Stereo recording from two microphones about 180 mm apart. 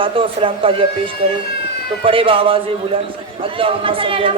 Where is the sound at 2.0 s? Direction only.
30° right (ahead or behind).